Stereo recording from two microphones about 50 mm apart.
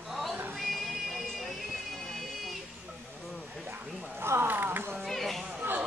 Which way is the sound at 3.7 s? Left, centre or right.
Right.